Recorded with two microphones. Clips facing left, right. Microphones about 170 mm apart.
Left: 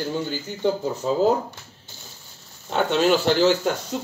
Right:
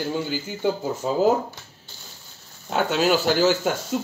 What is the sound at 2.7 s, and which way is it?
Speech, 5° right (ahead or behind).